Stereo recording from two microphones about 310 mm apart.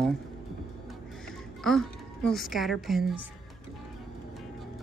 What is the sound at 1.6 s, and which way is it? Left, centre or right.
A child's voice, centre.